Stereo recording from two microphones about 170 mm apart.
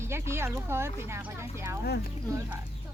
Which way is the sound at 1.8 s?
70° left (ahead or behind).